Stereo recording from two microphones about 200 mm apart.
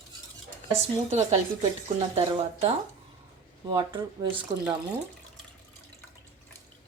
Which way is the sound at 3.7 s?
20° right (ahead or behind).